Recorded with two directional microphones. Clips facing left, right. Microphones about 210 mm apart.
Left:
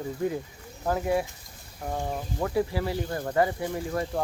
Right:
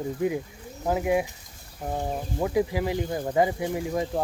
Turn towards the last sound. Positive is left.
turn(degrees=-15)  # may be behind; listen again after turning